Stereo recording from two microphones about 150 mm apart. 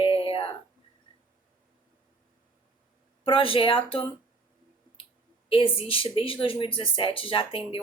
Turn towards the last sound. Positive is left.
turn(degrees=35)  # may be behind; listen again after turning